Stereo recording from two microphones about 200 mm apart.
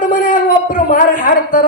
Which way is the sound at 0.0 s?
40° left (ahead or behind).